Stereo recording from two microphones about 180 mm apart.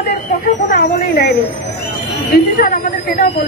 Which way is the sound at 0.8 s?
60° left (ahead or behind).